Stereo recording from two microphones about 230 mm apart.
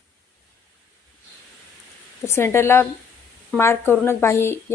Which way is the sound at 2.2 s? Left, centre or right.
Centre.